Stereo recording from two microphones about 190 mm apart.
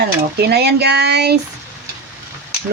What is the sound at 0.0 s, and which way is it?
Speech, 55° right (ahead or behind).